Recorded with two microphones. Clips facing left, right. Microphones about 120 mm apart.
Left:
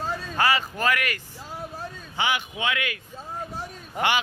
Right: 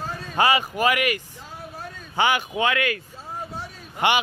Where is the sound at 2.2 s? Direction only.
45° right (ahead or behind).